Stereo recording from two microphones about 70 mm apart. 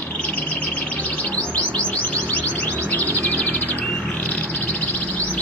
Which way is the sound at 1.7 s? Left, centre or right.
Left.